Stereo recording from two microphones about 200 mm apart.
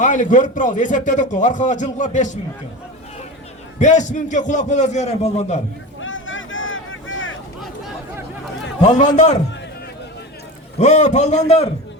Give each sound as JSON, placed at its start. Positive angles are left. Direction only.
{"t": 0.0, "sound": "a man's voice", "side_deg": 40}
{"t": 3.8, "sound": "a man's voice", "side_deg": 35}
{"t": 6.0, "sound": "vehicle", "side_deg": 75}
{"t": 8.8, "sound": "a man's voice", "side_deg": 35}
{"t": 10.8, "sound": "a man's voice", "side_deg": 35}